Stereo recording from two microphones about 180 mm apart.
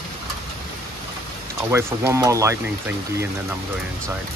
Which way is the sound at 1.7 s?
15° right (ahead or behind).